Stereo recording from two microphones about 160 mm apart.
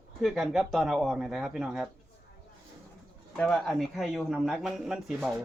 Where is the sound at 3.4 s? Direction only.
5° left (ahead or behind).